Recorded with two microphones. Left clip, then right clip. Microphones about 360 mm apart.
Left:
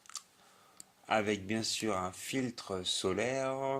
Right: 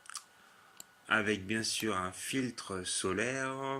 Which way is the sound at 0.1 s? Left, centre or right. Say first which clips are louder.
Left 1 dB; centre.